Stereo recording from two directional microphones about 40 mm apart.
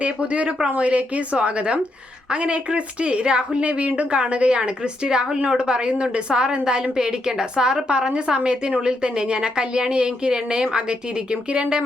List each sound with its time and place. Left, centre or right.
0.0 s a woman's voice: right